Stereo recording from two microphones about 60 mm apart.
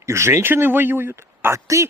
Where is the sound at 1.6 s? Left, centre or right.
Right.